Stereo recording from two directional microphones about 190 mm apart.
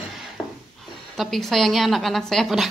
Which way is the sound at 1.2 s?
Centre (ahead or behind).